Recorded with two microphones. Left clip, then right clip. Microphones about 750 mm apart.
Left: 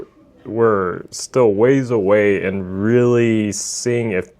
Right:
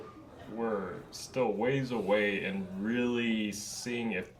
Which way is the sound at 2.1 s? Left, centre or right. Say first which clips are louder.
Left 14 dB; left.